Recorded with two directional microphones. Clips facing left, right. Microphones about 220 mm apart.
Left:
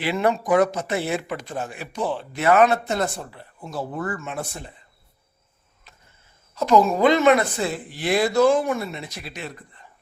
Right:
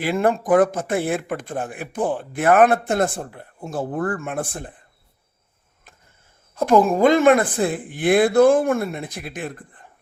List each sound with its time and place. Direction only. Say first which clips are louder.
0.0 s speech: right 2 dB; 50° right (ahead or behind)
6.5 s speech: right 2 dB; 50° right (ahead or behind)